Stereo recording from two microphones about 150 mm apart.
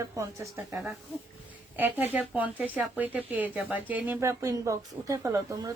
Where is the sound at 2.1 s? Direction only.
10° right (ahead or behind).